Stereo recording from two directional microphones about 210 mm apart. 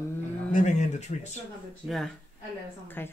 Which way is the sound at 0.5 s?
35° left (ahead or behind).